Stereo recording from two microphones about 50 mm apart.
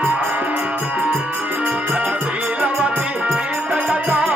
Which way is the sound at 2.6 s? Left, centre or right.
Right.